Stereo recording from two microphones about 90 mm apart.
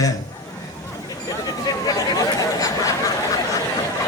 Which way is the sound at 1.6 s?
45° left (ahead or behind).